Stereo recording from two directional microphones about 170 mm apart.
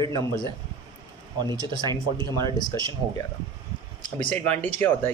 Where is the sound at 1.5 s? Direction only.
20° left (ahead or behind).